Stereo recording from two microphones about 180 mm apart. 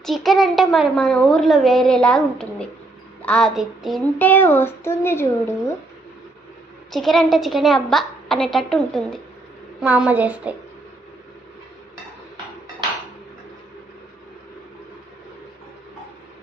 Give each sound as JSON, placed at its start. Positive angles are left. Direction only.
{"t": 0.0, "sound": "a woman's voice", "side_deg": 0}
{"t": 6.9, "sound": "a woman's voice", "side_deg": 0}
{"t": 9.8, "sound": "a woman's voice", "side_deg": -5}